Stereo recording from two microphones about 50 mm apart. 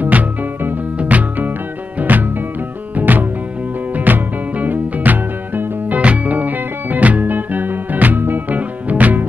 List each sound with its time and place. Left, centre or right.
1.0 s music: right